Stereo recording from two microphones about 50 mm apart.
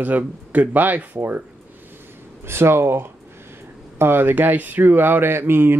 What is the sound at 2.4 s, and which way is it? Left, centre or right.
Speech, right.